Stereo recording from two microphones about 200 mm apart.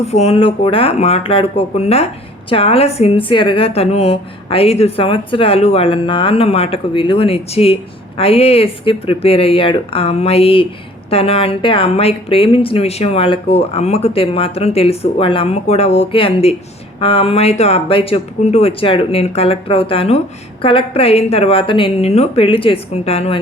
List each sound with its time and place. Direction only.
0.0 s a woman's voice: 30° left (ahead or behind)